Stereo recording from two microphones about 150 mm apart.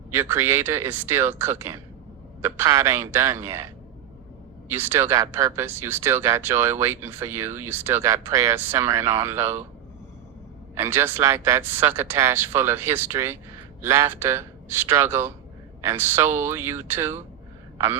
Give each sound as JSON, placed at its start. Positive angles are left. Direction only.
{"t": 0.1, "sound": "speech", "side_deg": -15}
{"t": 4.7, "sound": "speech", "side_deg": -15}
{"t": 10.8, "sound": "speech", "side_deg": -15}